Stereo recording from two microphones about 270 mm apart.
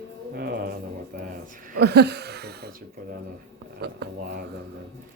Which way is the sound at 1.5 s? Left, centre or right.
Right.